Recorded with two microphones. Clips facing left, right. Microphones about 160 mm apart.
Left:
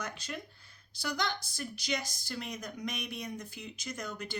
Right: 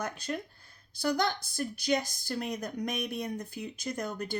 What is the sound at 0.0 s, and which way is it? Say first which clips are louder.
Speech: right 6 dB; 50° right (ahead or behind).